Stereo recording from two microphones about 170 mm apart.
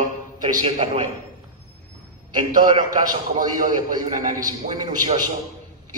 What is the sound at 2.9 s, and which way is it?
Speech, 50° right (ahead or behind).